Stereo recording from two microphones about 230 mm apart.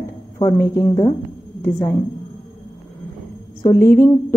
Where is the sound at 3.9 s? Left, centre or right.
Centre.